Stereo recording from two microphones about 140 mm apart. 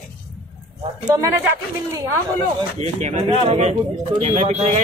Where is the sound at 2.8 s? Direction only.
50° right (ahead or behind).